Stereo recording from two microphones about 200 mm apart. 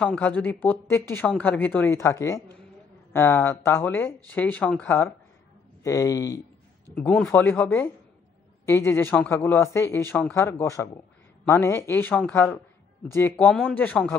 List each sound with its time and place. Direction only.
0.0 s speech: 5° left (ahead or behind)
7.0 s speech: 5° left (ahead or behind)